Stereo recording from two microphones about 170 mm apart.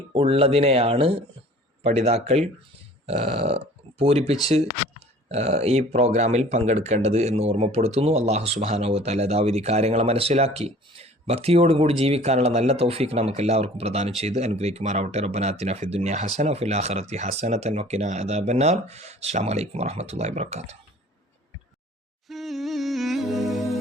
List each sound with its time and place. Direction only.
0.1 s speech: 35° right (ahead or behind)
22.3 s music: centre (ahead or behind)